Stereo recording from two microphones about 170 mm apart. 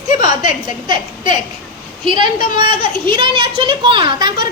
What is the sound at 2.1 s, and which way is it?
A woman's voice, 30° right (ahead or behind).